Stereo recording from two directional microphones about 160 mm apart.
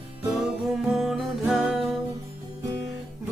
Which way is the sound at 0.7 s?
Centre (ahead or behind).